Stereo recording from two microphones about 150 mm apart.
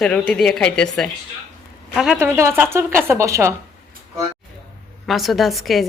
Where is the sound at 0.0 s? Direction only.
5° left (ahead or behind).